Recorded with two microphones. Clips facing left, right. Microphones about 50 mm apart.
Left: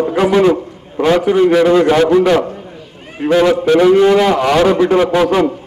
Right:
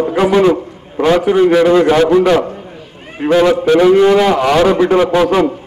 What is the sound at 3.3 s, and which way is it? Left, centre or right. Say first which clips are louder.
A man's voice: right 1 dB; right.